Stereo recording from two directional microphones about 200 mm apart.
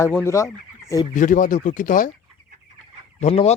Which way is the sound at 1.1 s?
40° left (ahead or behind).